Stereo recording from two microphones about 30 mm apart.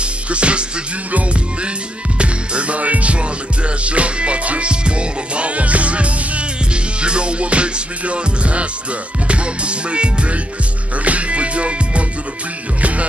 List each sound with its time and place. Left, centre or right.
0.0 s music: right
2.1 s music: right
11.1 s music: right